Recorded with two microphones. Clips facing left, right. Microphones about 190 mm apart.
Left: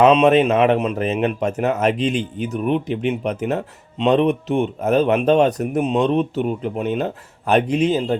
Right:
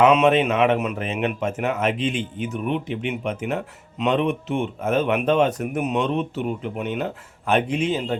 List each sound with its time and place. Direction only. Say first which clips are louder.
0.1 s speech: left 4 dB; 35° left (ahead or behind)